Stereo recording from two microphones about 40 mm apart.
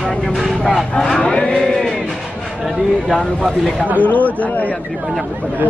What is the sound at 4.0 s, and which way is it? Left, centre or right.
Speech, left.